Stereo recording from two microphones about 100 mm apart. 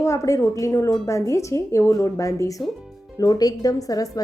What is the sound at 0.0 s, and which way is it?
A woman's voice, 30° left (ahead or behind).